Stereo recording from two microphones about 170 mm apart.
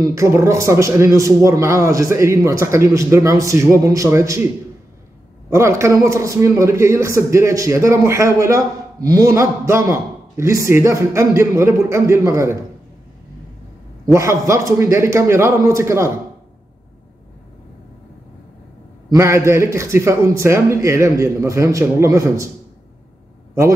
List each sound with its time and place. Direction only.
0.0 s a man's voice: 20° right (ahead or behind)
5.5 s a man's voice: 15° right (ahead or behind)
14.0 s a man's voice: 15° right (ahead or behind)
19.1 s a man's voice: 15° right (ahead or behind)